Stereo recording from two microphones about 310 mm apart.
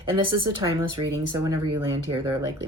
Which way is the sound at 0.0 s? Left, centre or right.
Centre.